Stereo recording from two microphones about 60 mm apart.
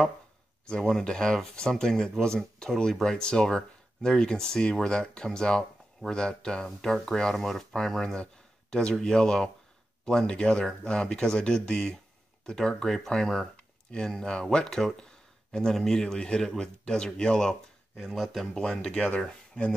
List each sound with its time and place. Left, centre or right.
0.7 s speech: centre
17.9 s speech: centre